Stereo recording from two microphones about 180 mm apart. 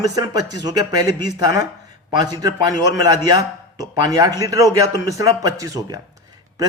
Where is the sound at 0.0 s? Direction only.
20° right (ahead or behind).